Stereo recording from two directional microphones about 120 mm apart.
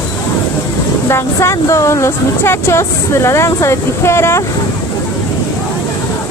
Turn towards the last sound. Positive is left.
turn(degrees=20)  # may be behind; listen again after turning